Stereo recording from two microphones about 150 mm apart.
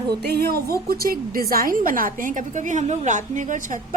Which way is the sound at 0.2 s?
90° right.